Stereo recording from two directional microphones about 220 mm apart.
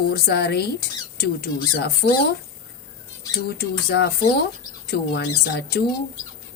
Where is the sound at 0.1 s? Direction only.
45° left (ahead or behind).